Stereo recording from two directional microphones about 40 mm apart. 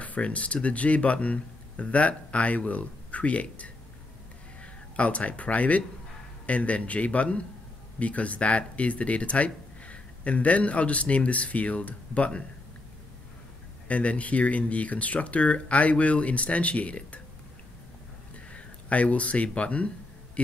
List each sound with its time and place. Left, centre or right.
0.0 s speech: left
4.9 s speech: left
13.8 s speech: left
18.3 s speech: left